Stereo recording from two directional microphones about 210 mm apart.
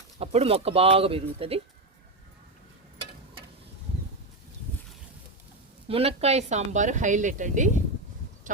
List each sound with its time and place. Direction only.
0.2 s speech: 30° right (ahead or behind)
5.9 s speech: 30° right (ahead or behind)